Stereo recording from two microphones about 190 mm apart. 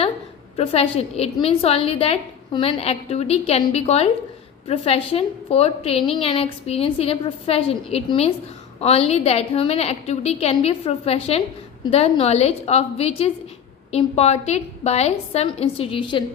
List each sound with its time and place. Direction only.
0.5 s a woman's voice: 30° left (ahead or behind)